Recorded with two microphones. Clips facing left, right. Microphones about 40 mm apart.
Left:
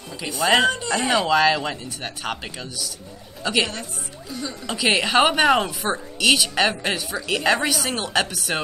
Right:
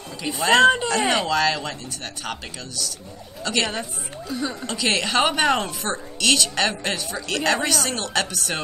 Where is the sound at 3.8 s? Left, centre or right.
Centre.